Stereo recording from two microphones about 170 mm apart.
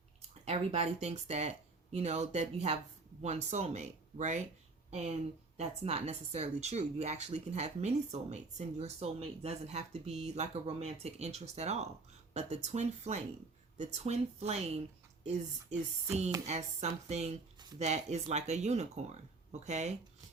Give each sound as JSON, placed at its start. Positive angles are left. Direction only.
{"t": 0.2, "sound": "speech", "side_deg": -35}
{"t": 15.7, "sound": "speech", "side_deg": -40}